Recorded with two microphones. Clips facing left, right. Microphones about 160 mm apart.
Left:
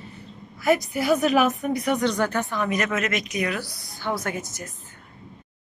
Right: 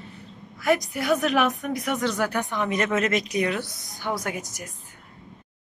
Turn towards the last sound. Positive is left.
turn(degrees=-10)  # may be behind; listen again after turning